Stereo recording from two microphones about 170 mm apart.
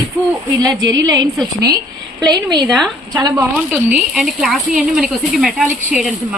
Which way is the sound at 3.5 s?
5° right (ahead or behind).